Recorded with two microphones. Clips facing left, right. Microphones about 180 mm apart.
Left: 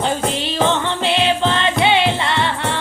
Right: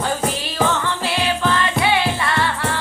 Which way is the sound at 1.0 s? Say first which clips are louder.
Left 4 dB; 25° left (ahead or behind).